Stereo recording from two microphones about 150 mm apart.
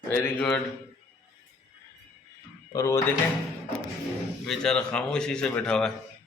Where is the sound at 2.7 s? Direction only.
20° left (ahead or behind).